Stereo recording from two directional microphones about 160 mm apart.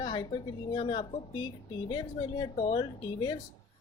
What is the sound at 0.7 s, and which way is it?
Speech, 30° left (ahead or behind).